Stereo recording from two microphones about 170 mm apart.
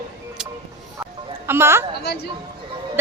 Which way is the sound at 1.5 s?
15° right (ahead or behind).